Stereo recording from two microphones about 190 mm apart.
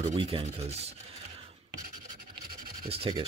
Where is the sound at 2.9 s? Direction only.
30° right (ahead or behind).